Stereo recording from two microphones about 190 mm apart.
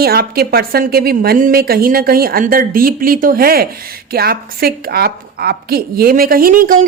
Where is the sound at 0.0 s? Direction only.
55° right (ahead or behind).